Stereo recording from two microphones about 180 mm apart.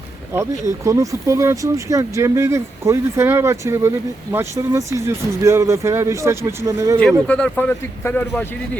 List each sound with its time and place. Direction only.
0.3 s speech: 15° right (ahead or behind)
7.3 s speech: 5° left (ahead or behind)